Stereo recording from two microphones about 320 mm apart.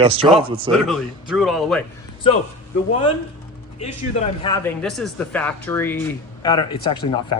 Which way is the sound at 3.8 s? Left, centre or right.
Centre.